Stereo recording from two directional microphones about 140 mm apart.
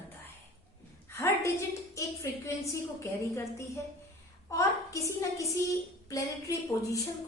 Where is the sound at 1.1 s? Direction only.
20° left (ahead or behind).